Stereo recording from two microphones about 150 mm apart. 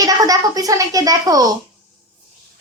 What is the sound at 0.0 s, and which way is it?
A woman's voice, 25° right (ahead or behind).